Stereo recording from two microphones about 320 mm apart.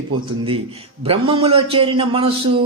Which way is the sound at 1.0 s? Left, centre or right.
Centre.